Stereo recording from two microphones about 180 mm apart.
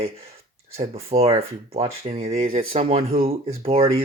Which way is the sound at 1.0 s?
35° right (ahead or behind).